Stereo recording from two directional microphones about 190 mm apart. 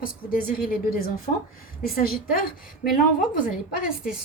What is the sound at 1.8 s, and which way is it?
Speech, 50° left (ahead or behind).